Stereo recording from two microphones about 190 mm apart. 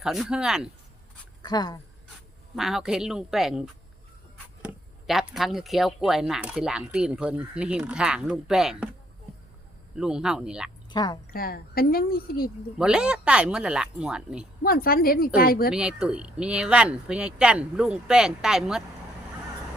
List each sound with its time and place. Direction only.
0.0 s speech: centre (ahead or behind)
1.4 s speech: 20° left (ahead or behind)
2.6 s speech: centre (ahead or behind)
9.9 s speech: 5° right (ahead or behind)
10.8 s speech: 20° left (ahead or behind)
11.3 s a woman's voice: 50° left (ahead or behind)
12.8 s speech: 5° right (ahead or behind)
14.6 s a woman's voice: 50° left (ahead or behind)
15.7 s speech: 5° right (ahead or behind)